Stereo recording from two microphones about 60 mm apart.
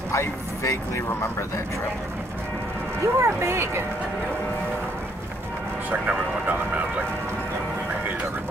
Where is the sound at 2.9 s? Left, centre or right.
Right.